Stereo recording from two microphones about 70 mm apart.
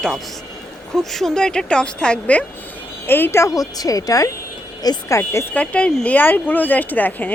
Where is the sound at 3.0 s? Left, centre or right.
Left.